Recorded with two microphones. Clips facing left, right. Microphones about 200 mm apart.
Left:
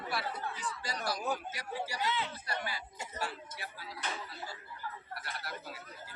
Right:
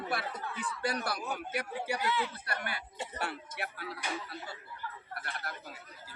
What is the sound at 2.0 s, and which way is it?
Speech, 20° left (ahead or behind).